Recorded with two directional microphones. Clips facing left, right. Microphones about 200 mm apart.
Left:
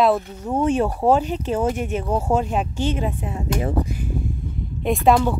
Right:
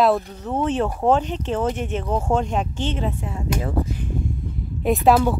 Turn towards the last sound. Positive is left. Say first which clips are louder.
# even
turn(degrees=-5)  # may be behind; listen again after turning